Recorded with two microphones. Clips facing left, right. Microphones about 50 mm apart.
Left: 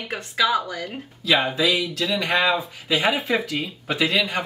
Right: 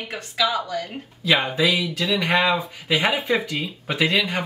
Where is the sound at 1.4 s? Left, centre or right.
Centre.